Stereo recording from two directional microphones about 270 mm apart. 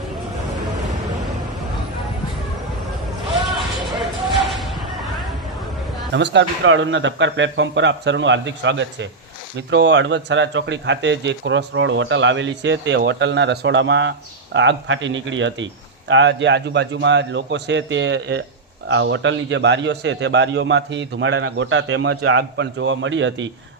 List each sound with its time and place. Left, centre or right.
3.4 s music: centre
6.1 s a man's voice: right